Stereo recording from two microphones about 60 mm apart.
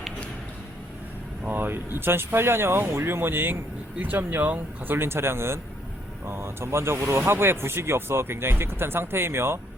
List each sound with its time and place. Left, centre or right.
1.5 s speech: right